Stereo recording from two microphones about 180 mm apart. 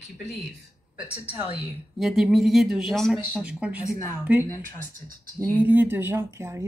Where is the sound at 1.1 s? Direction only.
10° right (ahead or behind).